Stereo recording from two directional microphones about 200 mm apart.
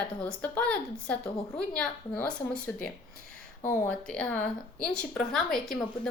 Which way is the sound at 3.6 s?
5° left (ahead or behind).